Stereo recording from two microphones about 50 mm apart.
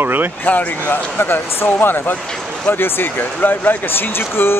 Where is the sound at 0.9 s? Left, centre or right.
Left.